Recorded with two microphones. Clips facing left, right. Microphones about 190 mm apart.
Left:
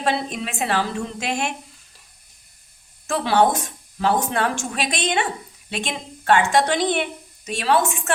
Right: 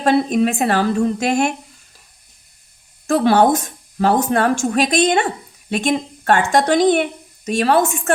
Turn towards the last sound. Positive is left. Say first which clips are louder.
# right 5 dB
turn(degrees=-45)  # may be behind; listen again after turning